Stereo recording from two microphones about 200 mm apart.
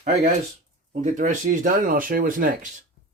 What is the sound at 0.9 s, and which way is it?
Speech, 40° right (ahead or behind).